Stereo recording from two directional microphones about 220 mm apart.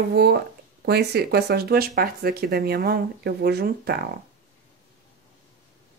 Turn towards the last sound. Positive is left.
turn(degrees=-45)  # may be behind; listen again after turning